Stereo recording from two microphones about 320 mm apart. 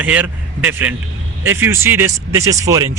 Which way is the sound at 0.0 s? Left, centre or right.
Centre.